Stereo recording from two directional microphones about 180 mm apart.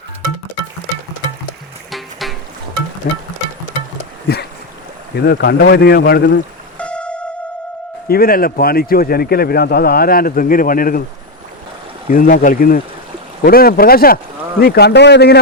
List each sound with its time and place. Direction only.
1.9 s music: centre (ahead or behind)
3.1 s speech: 55° left (ahead or behind)
5.1 s a man's voice: 65° left (ahead or behind)
6.7 s a sound: 5° left (ahead or behind)
8.0 s a man's voice: 55° left (ahead or behind)
12.1 s a man's voice: 50° left (ahead or behind); by 15.4 s 70° left (ahead or behind)